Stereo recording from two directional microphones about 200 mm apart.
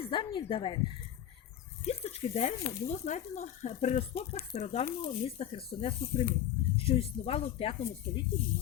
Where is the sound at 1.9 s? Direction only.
30° left (ahead or behind).